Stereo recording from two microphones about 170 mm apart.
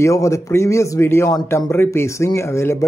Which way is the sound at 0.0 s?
15° left (ahead or behind).